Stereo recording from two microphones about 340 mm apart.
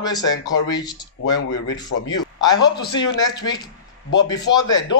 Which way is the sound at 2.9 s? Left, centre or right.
Centre.